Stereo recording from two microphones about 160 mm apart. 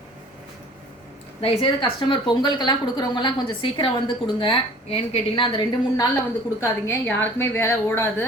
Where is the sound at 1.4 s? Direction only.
30° left (ahead or behind).